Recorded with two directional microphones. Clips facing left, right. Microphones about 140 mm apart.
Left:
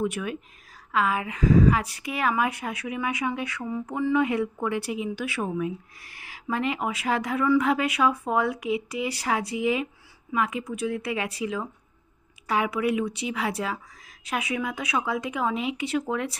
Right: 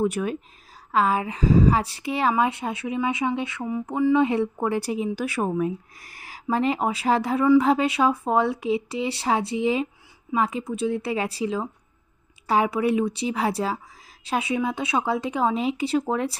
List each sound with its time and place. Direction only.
0.0 s a woman's voice: 35° right (ahead or behind)